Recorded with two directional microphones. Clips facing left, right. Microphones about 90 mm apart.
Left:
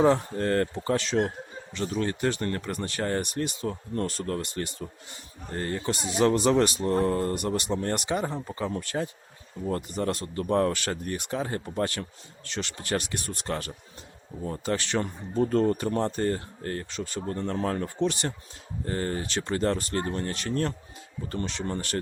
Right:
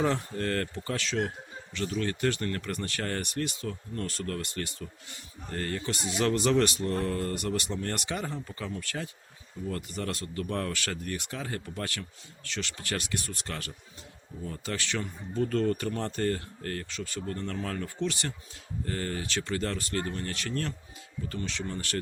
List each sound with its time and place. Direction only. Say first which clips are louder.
0.0 s speech: left 6 dB; 25° left (ahead or behind)
21.2 s speech: left 4 dB; 40° left (ahead or behind)